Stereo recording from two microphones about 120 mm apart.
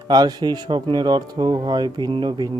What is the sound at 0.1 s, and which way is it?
Speech, 35° right (ahead or behind).